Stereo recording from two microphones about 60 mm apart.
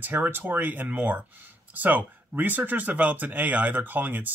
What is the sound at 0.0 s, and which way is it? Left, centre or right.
Speech, right.